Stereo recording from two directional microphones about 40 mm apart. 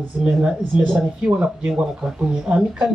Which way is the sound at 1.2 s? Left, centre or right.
Right.